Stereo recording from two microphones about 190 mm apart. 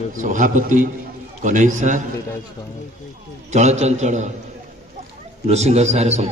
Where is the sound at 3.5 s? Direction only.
35° right (ahead or behind).